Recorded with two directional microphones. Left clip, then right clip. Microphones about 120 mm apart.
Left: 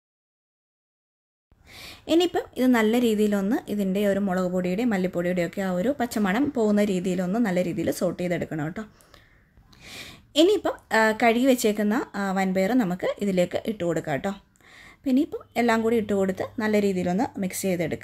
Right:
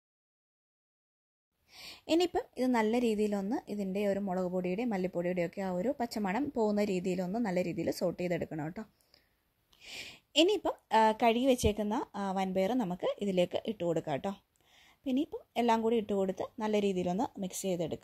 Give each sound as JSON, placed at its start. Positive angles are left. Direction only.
{"t": 1.7, "sound": "a woman's voice", "side_deg": -90}
{"t": 9.7, "sound": "a woman's voice", "side_deg": -90}